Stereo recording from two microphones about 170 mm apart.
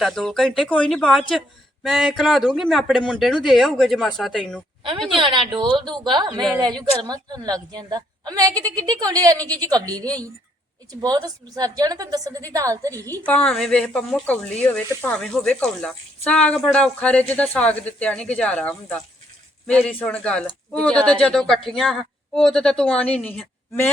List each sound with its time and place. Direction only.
0.0 s speech: 5° left (ahead or behind)
5.1 s a woman's voice: 30° right (ahead or behind)
11.0 s a woman's voice: 20° right (ahead or behind)
13.1 s speech: 10° left (ahead or behind)